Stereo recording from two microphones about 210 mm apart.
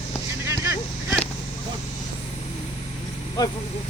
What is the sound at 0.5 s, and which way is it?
Vehicle, 15° right (ahead or behind).